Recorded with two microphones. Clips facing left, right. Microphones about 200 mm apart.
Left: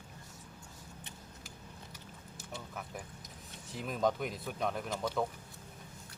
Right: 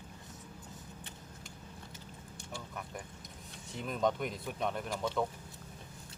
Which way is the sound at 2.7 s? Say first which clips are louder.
Even; centre (ahead or behind).